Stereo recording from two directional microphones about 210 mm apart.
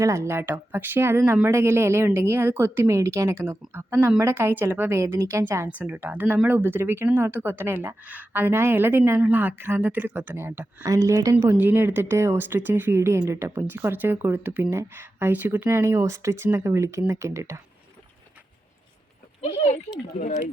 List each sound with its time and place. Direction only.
0.0 s speech: 15° right (ahead or behind)
19.4 s speech: 30° left (ahead or behind)